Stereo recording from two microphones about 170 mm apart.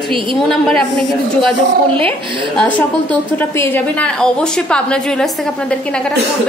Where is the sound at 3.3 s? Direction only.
15° left (ahead or behind).